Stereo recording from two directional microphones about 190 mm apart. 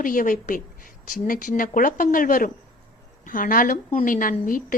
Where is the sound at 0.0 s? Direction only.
45° left (ahead or behind).